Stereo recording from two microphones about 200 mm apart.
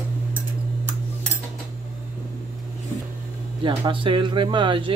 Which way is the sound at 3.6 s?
25° right (ahead or behind).